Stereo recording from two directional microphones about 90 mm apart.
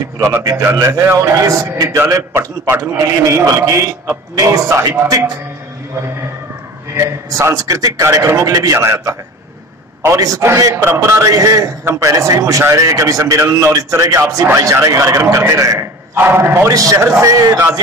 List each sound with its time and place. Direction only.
0.2 s a man's voice: 30° right (ahead or behind)
7.3 s a man's voice: 35° right (ahead or behind)